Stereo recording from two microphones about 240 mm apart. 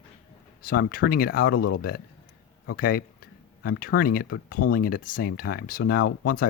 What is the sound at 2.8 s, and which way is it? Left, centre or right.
Speech, left.